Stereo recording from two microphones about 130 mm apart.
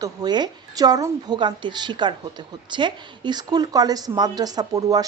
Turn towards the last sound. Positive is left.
turn(degrees=-30)  # may be behind; listen again after turning